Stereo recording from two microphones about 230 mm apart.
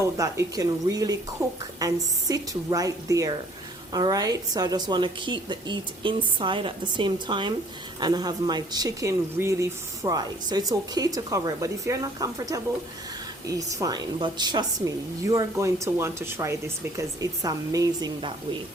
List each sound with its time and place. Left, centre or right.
0.0 s a woman's voice: centre